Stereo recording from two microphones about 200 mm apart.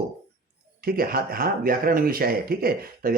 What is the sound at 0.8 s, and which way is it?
Speech, 50° right (ahead or behind).